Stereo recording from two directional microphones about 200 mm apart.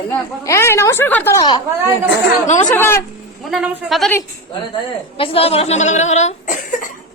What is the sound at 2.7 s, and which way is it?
Speech, 10° left (ahead or behind).